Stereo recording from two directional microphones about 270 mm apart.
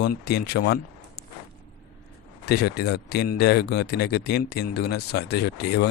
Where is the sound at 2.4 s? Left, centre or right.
Left.